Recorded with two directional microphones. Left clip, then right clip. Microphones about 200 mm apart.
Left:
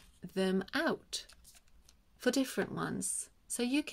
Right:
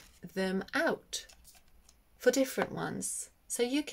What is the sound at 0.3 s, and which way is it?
Speech, 35° left (ahead or behind).